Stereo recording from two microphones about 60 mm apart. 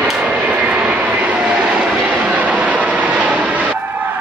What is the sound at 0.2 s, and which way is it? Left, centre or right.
Vehicle, right.